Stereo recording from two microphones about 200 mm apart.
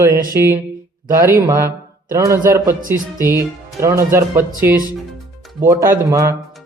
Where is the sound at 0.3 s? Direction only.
15° right (ahead or behind).